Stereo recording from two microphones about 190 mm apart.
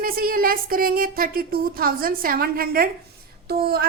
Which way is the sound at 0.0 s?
50° right (ahead or behind).